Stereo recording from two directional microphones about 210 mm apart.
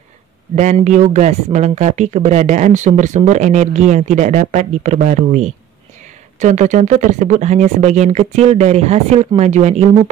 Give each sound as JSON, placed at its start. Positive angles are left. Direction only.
{"t": 0.6, "sound": "speech", "side_deg": -35}